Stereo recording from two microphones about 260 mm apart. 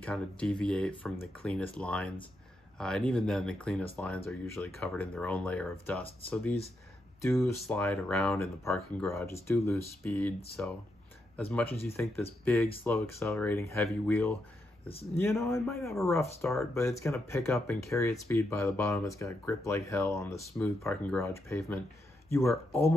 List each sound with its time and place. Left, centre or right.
0.0 s speech: centre
7.2 s speech: centre
16.7 s speech: centre